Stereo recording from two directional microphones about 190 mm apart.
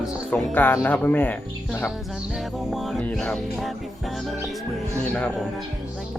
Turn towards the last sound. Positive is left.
turn(degrees=5)  # may be behind; listen again after turning